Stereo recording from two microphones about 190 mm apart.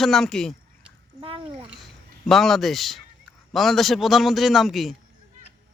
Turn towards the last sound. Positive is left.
turn(degrees=0)  # may be behind; listen again after turning